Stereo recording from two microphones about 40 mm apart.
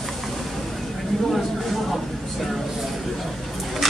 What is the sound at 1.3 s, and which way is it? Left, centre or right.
Speech, centre.